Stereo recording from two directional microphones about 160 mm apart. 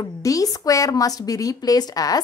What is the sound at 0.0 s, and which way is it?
A woman's voice, 20° left (ahead or behind).